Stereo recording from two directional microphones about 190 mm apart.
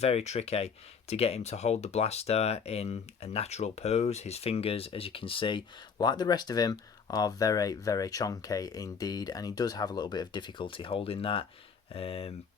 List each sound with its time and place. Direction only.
0.0 s speech: 35° left (ahead or behind)